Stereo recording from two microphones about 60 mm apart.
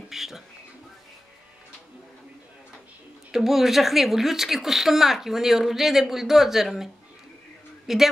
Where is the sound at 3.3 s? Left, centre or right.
Centre.